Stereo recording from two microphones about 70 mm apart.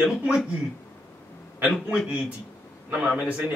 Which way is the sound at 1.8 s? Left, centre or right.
Centre.